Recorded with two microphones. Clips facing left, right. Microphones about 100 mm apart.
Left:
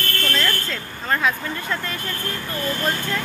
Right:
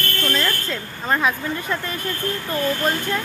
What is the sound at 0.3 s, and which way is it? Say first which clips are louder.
Speech: right 1 dB; 10° right (ahead or behind).